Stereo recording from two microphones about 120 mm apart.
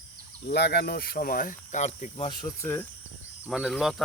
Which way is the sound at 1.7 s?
75° left (ahead or behind).